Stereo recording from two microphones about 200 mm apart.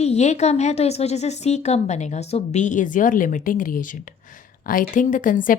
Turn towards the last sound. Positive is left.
turn(degrees=40)  # may be behind; listen again after turning